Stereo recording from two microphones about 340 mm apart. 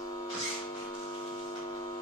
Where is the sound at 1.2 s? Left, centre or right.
Centre.